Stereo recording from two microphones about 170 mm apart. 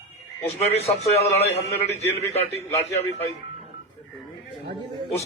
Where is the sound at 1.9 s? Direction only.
40° left (ahead or behind).